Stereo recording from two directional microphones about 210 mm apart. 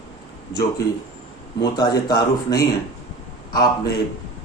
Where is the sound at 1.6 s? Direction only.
20° left (ahead or behind).